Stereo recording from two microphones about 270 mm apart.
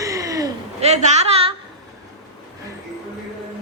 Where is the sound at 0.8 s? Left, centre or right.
Right.